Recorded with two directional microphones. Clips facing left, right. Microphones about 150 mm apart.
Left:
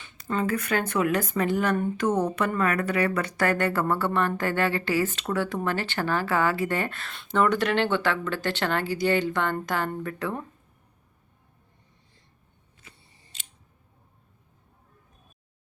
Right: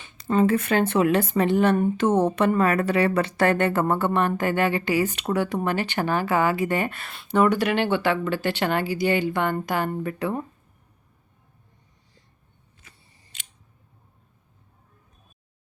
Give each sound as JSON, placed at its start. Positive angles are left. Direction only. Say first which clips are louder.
{"t": 0.0, "sound": "speech", "louder": "right 7 dB", "side_deg": -20}